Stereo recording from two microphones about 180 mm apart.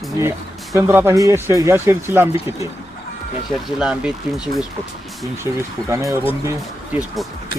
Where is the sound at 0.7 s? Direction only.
15° right (ahead or behind).